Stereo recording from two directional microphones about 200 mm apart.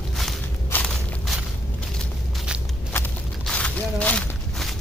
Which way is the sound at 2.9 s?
10° left (ahead or behind).